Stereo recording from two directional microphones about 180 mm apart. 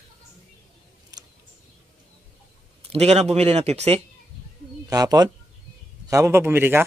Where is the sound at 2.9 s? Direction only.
35° right (ahead or behind).